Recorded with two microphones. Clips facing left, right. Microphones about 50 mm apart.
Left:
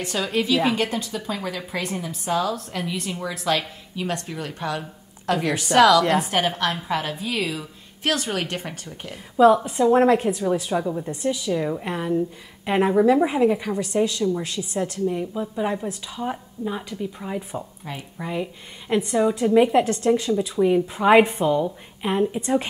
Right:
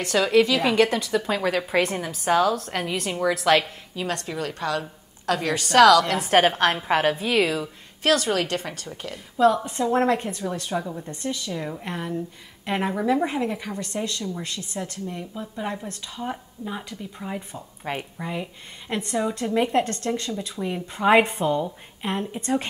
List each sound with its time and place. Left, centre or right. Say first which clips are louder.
0.0 s a woman's voice: right 5 dB; right
4.7 s a sound: right 3 dB; right
5.8 s a woman's voice: right 1 dB; right
6.0 s a woman's voice: left 5 dB; left
6.3 s a woman's voice: right 4 dB; right
9.6 s a woman's voice: left 5 dB; centre
17.9 s a woman's voice: right 9 dB; right
18.2 s a woman's voice: left 3 dB; centre